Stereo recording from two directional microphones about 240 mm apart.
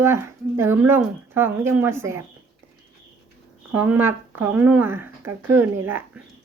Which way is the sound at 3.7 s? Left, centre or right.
Centre.